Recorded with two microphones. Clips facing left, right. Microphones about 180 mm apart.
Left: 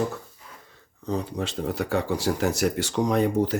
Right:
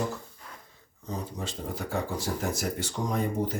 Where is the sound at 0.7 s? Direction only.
70° left (ahead or behind).